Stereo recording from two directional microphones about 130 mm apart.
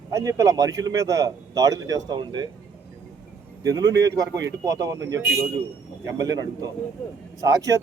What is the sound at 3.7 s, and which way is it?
A man's voice, 30° right (ahead or behind).